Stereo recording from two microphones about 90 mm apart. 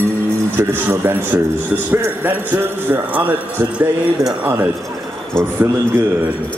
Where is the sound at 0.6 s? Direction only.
25° right (ahead or behind).